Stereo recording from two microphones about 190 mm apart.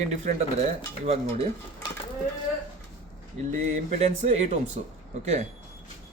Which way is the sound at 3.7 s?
35° right (ahead or behind).